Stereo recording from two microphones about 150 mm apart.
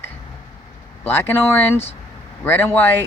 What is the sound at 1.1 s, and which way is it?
Speech, 15° left (ahead or behind).